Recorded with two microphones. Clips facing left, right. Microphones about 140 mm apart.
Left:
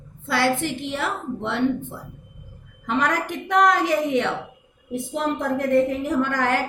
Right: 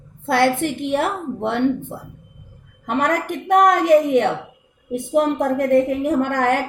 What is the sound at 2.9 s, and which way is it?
A woman's voice, 50° right (ahead or behind).